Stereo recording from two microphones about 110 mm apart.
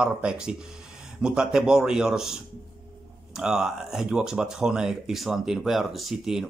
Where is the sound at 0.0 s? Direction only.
10° right (ahead or behind).